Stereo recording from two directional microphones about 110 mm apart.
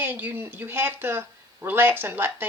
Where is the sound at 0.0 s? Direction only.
15° right (ahead or behind).